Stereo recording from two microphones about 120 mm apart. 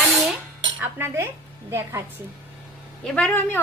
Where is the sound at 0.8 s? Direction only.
20° right (ahead or behind).